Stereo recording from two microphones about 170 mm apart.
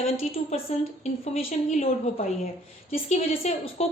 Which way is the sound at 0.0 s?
35° left (ahead or behind).